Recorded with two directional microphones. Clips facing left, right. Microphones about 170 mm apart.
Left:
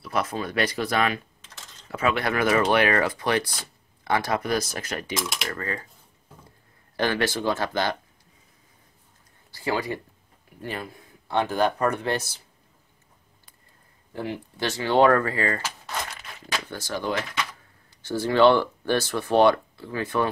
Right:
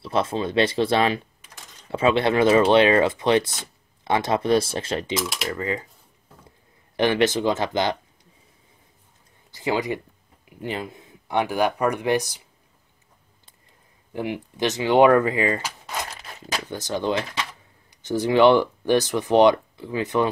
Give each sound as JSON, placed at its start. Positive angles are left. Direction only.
{"t": 0.0, "sound": "speech", "side_deg": -25}
{"t": 1.4, "sound": "typing", "side_deg": -10}
{"t": 1.9, "sound": "speech", "side_deg": -25}
{"t": 5.2, "sound": "speech", "side_deg": 0}
{"t": 5.5, "sound": "speech", "side_deg": -20}
{"t": 7.0, "sound": "speech", "side_deg": -20}
{"t": 9.5, "sound": "speech", "side_deg": -20}
{"t": 14.1, "sound": "speech", "side_deg": -15}
{"t": 16.1, "sound": "a sound", "side_deg": -35}
{"t": 16.6, "sound": "speech", "side_deg": -20}